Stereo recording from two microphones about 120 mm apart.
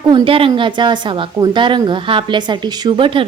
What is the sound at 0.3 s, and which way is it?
A woman's voice, 50° right (ahead or behind).